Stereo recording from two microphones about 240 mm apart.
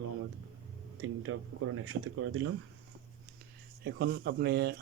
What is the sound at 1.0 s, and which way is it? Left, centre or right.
Speech, right.